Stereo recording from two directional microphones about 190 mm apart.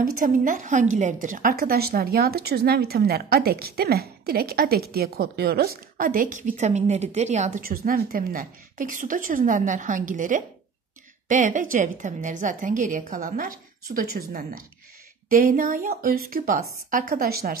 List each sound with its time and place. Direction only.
0.0 s speech: 45° right (ahead or behind)